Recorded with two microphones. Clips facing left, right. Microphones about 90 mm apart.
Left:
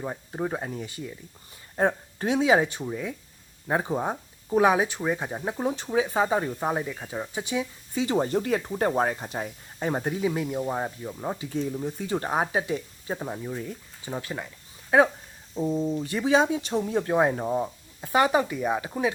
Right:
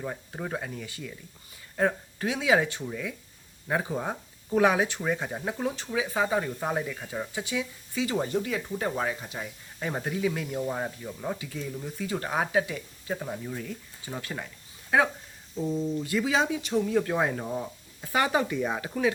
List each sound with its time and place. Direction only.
0.0 s speech: 20° left (ahead or behind)
5.9 s speech: 30° left (ahead or behind)
6.7 s speech: 15° left (ahead or behind)
11.4 s speech: 35° left (ahead or behind)
18.3 s speech: 10° left (ahead or behind)